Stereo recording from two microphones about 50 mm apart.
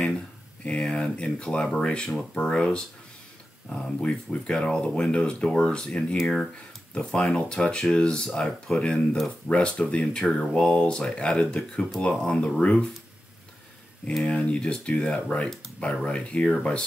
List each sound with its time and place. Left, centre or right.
0.7 s speech: left
6.5 s speech: left
14.2 s speech: left